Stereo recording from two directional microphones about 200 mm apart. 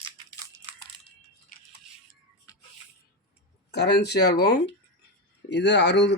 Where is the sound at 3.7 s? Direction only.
55° left (ahead or behind).